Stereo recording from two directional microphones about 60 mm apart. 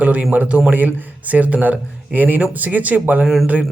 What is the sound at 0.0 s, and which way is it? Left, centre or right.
A man's voice, right.